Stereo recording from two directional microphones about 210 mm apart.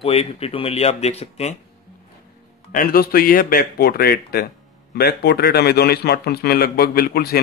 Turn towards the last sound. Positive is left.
turn(degrees=45)  # may be behind; listen again after turning